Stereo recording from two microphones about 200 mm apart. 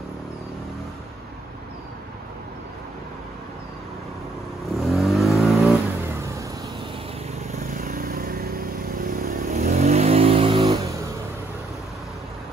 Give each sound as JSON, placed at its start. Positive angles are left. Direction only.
{"t": 4.6, "sound": "vehicle", "side_deg": 0}
{"t": 7.7, "sound": "vehicle", "side_deg": -45}